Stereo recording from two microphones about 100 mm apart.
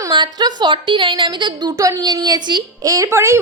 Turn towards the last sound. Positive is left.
turn(degrees=-30)  # may be behind; listen again after turning